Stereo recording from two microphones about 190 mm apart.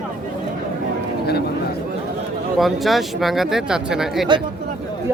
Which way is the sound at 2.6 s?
Centre (ahead or behind).